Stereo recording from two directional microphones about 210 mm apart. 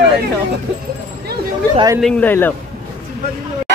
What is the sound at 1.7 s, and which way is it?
Speech, 20° right (ahead or behind).